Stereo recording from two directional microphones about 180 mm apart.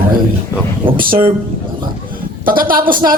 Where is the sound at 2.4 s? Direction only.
50° right (ahead or behind).